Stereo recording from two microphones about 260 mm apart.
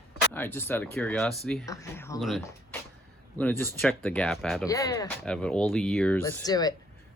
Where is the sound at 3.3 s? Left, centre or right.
Centre.